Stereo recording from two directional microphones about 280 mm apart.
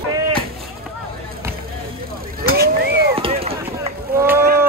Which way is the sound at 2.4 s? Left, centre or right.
Right.